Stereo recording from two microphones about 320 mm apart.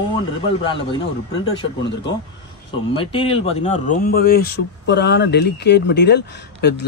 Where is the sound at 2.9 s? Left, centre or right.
Centre.